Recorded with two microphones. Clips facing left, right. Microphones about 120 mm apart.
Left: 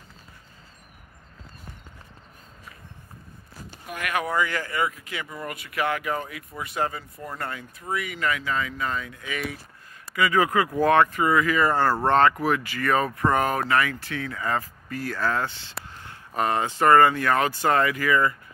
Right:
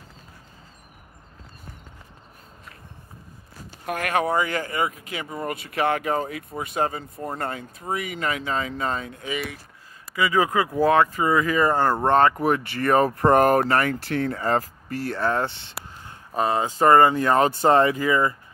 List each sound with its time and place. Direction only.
4.0 s speech: 30° right (ahead or behind)
10.1 s speech: 20° right (ahead or behind)
13.3 s speech: 50° right (ahead or behind)
15.0 s speech: 25° right (ahead or behind)
16.3 s speech: 15° right (ahead or behind)